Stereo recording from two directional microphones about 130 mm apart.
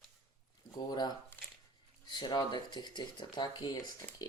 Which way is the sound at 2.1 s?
35° left (ahead or behind).